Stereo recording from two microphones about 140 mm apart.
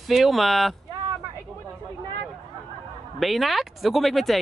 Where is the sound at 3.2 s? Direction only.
Centre (ahead or behind).